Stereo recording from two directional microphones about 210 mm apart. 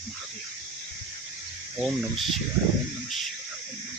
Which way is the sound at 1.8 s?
Centre (ahead or behind).